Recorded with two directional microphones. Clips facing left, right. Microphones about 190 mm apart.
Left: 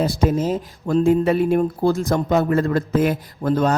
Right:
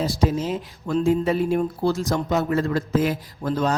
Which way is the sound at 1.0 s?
60° left (ahead or behind).